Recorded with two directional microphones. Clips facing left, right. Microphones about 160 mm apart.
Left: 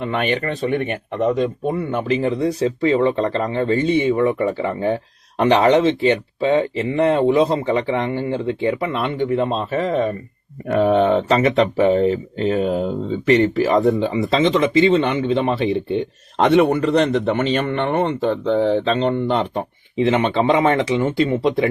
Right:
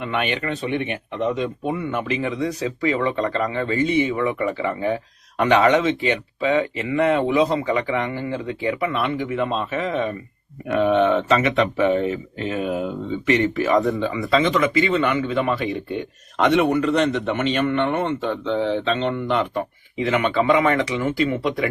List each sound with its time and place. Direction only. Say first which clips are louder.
0.0 s speech: left 3 dB; 40° left (ahead or behind)
2.0 s speech: left 5 dB; 35° left (ahead or behind)